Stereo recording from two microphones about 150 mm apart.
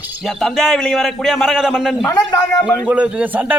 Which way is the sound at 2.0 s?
20° left (ahead or behind).